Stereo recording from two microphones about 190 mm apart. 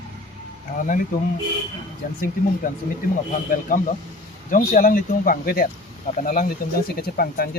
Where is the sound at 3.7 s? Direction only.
45° left (ahead or behind).